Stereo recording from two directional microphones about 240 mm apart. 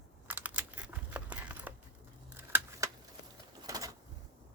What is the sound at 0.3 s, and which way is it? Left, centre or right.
Computer keyboard, centre.